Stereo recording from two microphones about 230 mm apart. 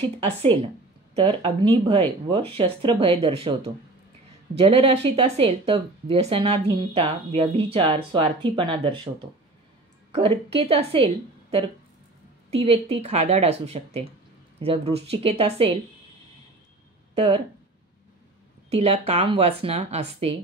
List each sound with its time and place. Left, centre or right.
0.2 s speech: right
10.1 s speech: right
17.1 s speech: right
18.7 s speech: right